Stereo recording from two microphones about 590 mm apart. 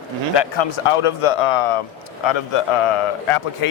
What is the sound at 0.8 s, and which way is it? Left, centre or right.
Speech, left.